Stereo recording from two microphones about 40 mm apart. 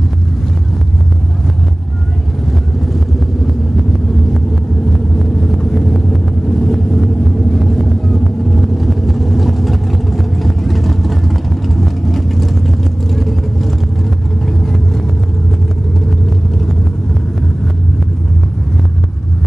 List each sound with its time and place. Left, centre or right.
4.9 s vehicle: centre